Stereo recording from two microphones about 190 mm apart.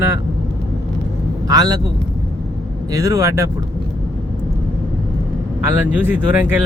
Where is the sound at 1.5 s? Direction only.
20° right (ahead or behind).